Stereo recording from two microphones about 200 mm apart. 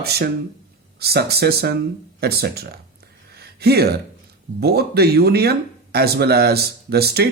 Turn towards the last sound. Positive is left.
turn(degrees=-55)  # may be behind; listen again after turning